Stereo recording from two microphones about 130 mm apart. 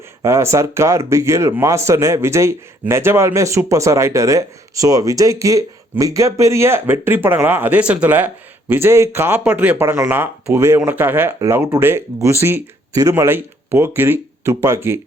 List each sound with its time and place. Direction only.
0.2 s speech: 20° right (ahead or behind)